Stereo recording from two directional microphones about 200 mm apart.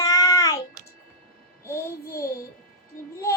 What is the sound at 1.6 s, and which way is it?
Child singing, 15° left (ahead or behind).